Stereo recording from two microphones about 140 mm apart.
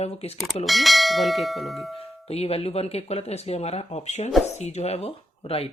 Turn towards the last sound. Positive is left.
turn(degrees=45)  # may be behind; listen again after turning